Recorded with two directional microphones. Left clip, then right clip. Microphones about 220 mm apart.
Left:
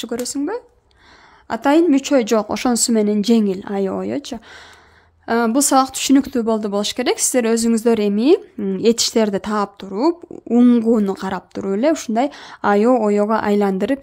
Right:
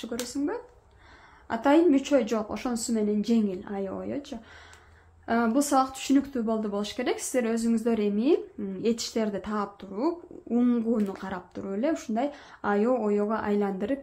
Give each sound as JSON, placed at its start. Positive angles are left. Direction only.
{"t": 0.0, "sound": "speech", "side_deg": 50}